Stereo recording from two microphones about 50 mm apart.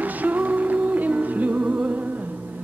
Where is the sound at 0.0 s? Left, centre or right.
Right.